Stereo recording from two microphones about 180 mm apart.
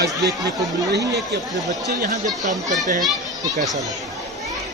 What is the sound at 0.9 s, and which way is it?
Speech, 65° right (ahead or behind).